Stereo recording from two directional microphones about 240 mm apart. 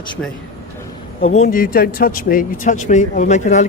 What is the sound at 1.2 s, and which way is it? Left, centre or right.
Speech, left.